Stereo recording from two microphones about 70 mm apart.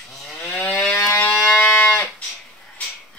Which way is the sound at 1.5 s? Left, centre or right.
Left.